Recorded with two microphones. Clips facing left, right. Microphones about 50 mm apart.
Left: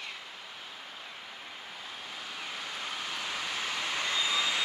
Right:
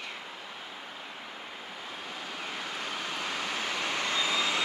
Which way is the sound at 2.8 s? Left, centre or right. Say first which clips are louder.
Right 2 dB; right.